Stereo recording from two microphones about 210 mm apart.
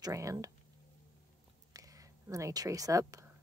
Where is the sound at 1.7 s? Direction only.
15° right (ahead or behind).